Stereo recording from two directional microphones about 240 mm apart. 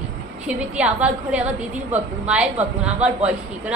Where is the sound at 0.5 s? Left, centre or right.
Centre.